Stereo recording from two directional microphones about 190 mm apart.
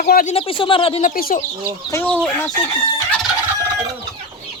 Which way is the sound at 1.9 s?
5° left (ahead or behind).